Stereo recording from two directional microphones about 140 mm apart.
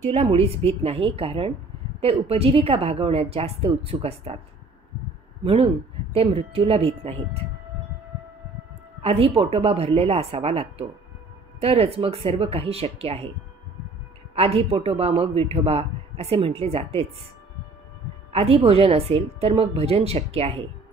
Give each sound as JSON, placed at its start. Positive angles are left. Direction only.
{"t": 0.1, "sound": "a man's voice", "side_deg": -45}
{"t": 5.4, "sound": "a man's voice", "side_deg": -40}
{"t": 9.0, "sound": "a man's voice", "side_deg": -45}
{"t": 14.3, "sound": "a man's voice", "side_deg": -45}
{"t": 18.3, "sound": "a man's voice", "side_deg": -45}